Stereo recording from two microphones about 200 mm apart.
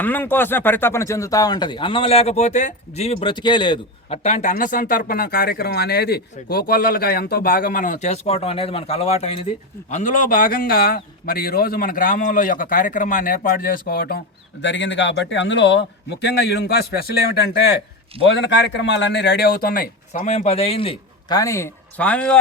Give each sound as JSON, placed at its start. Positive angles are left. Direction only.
{"t": 0.0, "sound": "speech", "side_deg": 10}
{"t": 9.9, "sound": "a man's voice", "side_deg": 40}
{"t": 14.6, "sound": "a man's voice", "side_deg": 65}